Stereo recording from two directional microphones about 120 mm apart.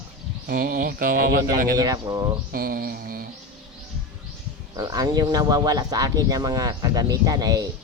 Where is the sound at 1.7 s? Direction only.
30° right (ahead or behind).